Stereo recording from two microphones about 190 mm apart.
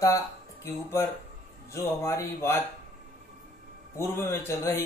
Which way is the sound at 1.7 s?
15° left (ahead or behind).